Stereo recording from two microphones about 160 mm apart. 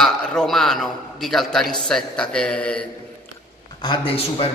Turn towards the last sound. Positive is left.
turn(degrees=35)  # may be behind; listen again after turning